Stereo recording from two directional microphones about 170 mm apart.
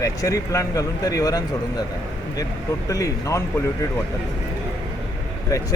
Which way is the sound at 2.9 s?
20° left (ahead or behind).